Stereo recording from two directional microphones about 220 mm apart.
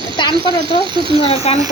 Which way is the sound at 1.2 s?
25° left (ahead or behind).